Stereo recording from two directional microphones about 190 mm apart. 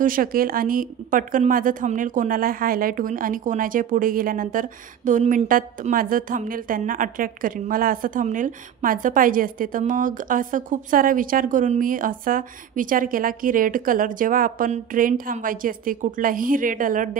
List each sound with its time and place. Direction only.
0.0 s a woman's voice: 45° right (ahead or behind)